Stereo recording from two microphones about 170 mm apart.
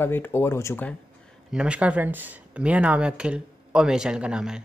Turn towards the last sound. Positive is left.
turn(degrees=-5)  # may be behind; listen again after turning